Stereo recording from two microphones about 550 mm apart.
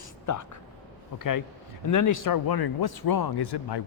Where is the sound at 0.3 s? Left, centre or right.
Left.